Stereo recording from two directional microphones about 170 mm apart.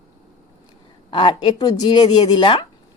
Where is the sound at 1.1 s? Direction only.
30° left (ahead or behind).